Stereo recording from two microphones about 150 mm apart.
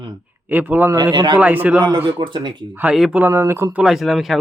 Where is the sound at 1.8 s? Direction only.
30° right (ahead or behind).